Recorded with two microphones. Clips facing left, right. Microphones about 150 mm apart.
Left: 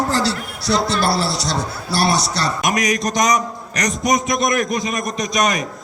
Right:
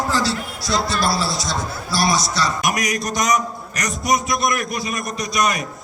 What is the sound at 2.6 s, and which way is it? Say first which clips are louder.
A man's voice: left 3 dB; 20° left (ahead or behind).